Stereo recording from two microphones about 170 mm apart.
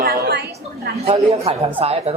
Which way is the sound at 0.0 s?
65° right (ahead or behind).